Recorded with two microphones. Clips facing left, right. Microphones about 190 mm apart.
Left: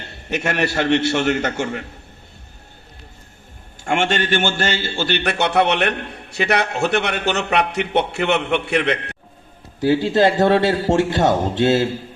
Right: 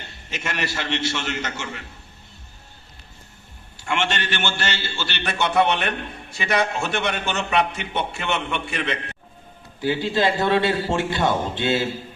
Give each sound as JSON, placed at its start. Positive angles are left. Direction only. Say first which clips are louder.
{"t": 0.3, "sound": "a man's voice", "louder": "left 8 dB", "side_deg": 60}
{"t": 3.8, "sound": "a man's voice", "louder": "left 6 dB", "side_deg": 50}
{"t": 9.9, "sound": "a man's voice", "louder": "left 6 dB", "side_deg": 50}